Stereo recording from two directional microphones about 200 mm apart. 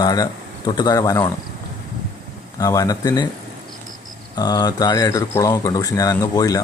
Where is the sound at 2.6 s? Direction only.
15° left (ahead or behind).